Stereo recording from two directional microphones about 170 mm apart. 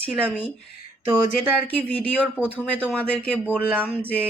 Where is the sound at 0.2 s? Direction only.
10° right (ahead or behind).